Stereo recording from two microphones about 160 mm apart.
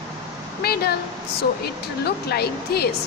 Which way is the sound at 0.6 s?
75° left (ahead or behind).